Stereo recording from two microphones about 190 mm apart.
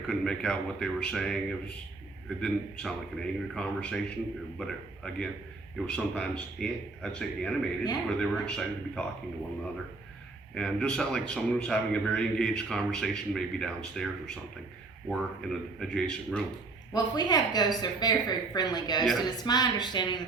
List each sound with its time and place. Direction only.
0.1 s a man's voice: 5° left (ahead or behind)
10.5 s a man's voice: 5° left (ahead or behind)
16.9 s speech: 20° left (ahead or behind)
19.0 s a man's voice: centre (ahead or behind)
19.5 s speech: 20° left (ahead or behind)